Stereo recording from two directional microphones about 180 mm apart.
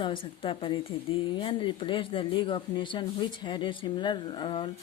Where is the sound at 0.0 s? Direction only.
30° left (ahead or behind).